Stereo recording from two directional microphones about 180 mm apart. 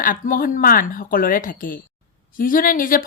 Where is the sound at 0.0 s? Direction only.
50° left (ahead or behind).